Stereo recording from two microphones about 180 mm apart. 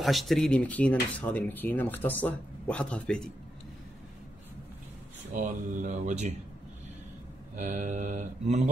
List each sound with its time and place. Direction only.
0.0 s speech: centre (ahead or behind)
5.3 s mantra: 50° right (ahead or behind)
7.5 s mantra: 45° right (ahead or behind)